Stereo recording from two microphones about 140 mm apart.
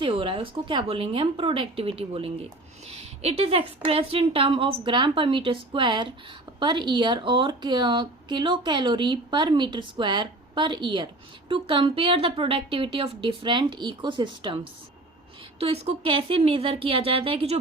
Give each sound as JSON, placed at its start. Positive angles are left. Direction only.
{"t": 0.0, "sound": "a woman's voice", "side_deg": -35}
{"t": 15.5, "sound": "speech", "side_deg": -45}